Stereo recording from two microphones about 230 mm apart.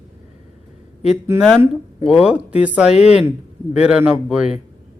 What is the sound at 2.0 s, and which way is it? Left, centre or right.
Speech, centre.